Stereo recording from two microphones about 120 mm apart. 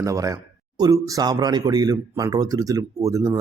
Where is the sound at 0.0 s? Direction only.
25° right (ahead or behind).